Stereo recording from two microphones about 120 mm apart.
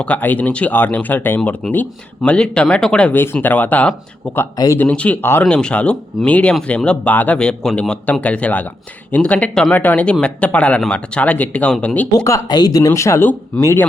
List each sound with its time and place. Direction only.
0.0 s speech: 15° left (ahead or behind)
4.5 s speech: 30° left (ahead or behind)
4.8 s speech: 10° left (ahead or behind)
12.1 s speech: 30° left (ahead or behind)